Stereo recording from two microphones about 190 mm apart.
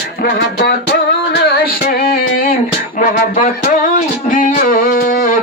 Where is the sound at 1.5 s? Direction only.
55° left (ahead or behind).